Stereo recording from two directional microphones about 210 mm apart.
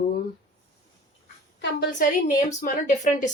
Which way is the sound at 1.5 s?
55° left (ahead or behind).